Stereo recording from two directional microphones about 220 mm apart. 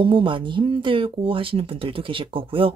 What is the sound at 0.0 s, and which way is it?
Speech, 20° right (ahead or behind).